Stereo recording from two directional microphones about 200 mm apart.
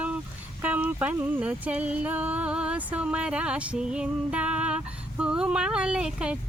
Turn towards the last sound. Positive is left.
turn(degrees=-5)  # may be behind; listen again after turning